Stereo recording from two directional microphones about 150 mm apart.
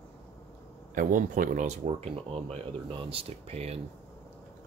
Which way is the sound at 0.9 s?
65° right (ahead or behind).